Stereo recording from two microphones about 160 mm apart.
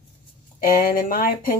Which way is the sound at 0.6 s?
65° left (ahead or behind).